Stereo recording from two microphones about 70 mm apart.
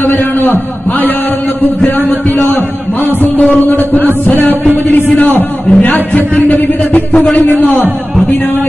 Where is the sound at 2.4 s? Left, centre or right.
Left.